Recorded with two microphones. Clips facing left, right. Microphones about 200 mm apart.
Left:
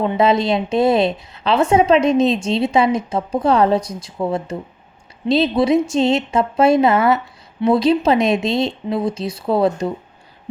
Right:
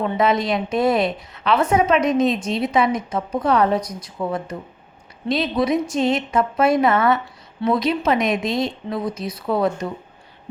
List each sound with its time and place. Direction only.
0.0 s a woman's voice: 25° left (ahead or behind)